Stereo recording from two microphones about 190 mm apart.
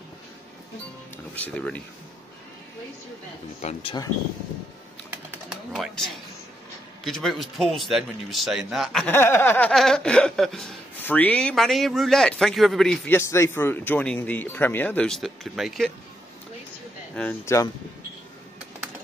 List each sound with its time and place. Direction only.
1.3 s speech: 10° left (ahead or behind)
3.6 s speech: 30° left (ahead or behind)
5.3 s pigeon: 5° right (ahead or behind)
7.1 s speech: centre (ahead or behind)
9.1 s speech: 10° left (ahead or behind)
17.1 s speech: 5° left (ahead or behind)